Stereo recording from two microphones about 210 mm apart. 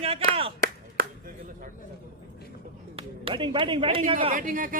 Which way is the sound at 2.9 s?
25° right (ahead or behind).